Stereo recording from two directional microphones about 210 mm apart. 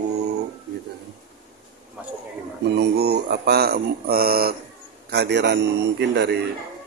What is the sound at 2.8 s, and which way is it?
Speech, 50° right (ahead or behind).